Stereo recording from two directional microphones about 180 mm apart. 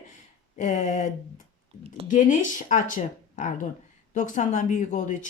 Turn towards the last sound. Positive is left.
turn(degrees=45)  # may be behind; listen again after turning